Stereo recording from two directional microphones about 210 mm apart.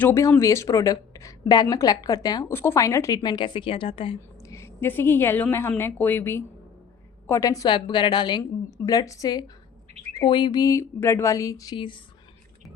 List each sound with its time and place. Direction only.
0.0 s a woman's voice: 15° left (ahead or behind)
4.5 s a woman's voice: 10° left (ahead or behind)